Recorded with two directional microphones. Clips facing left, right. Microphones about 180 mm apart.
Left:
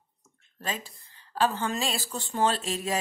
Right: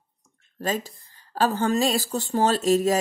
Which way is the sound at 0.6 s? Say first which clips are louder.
Right 8 dB; 40° right (ahead or behind).